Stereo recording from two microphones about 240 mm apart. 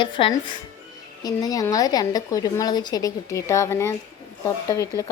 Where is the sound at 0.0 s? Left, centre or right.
Centre.